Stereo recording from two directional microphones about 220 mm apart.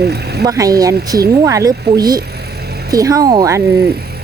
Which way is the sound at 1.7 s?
45° right (ahead or behind).